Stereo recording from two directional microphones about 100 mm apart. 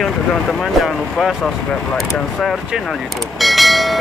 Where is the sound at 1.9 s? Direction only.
Centre (ahead or behind).